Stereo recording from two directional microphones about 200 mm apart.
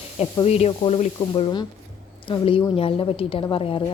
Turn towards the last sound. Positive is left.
turn(degrees=25)  # may be behind; listen again after turning